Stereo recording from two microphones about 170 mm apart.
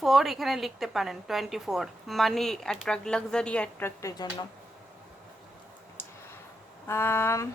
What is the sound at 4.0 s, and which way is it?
Speech, 20° left (ahead or behind).